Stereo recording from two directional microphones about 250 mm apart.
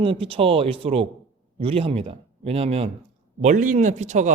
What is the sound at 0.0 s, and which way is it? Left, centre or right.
A woman's voice, right.